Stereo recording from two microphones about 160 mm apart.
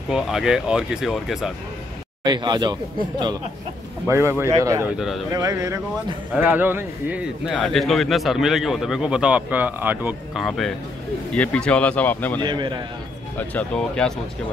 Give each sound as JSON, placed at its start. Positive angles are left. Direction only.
{"t": 0.1, "sound": "a man's voice", "side_deg": -5}
{"t": 2.2, "sound": "speech", "side_deg": -25}
{"t": 4.9, "sound": "a man's voice", "side_deg": -5}
{"t": 5.3, "sound": "a man's voice", "side_deg": -20}
{"t": 11.3, "sound": "speech", "side_deg": 10}
{"t": 12.4, "sound": "speech", "side_deg": -30}
{"t": 13.4, "sound": "speech", "side_deg": 10}